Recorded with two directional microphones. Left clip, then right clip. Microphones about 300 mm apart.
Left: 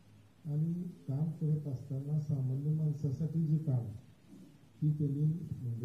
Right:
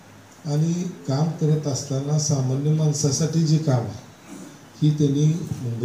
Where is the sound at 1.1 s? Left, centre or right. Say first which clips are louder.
Right 17 dB; centre.